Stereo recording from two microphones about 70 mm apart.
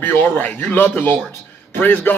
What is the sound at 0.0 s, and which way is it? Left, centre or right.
A man's voice, left.